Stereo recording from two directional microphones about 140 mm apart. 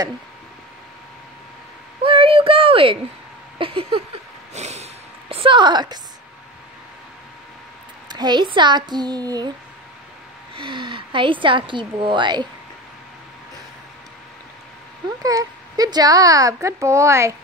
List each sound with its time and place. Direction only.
2.0 s a sound: 40° right (ahead or behind)
3.5 s a woman's voice: 40° right (ahead or behind)
4.6 s snort: 50° right (ahead or behind)
5.3 s a woman's voice: 40° right (ahead or behind)
8.1 s a woman's voice: 30° right (ahead or behind)
10.5 s a woman's voice: 35° right (ahead or behind)
15.0 s a woman's voice: 25° right (ahead or behind)